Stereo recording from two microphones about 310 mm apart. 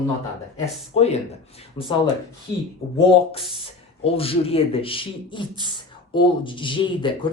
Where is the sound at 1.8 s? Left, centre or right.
Centre.